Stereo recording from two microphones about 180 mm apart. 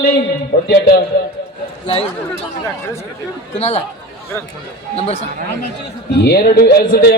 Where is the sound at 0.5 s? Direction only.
45° left (ahead or behind).